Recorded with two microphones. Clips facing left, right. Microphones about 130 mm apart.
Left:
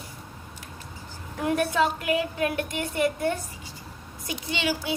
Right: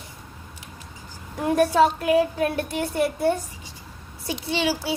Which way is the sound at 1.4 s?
40° right (ahead or behind).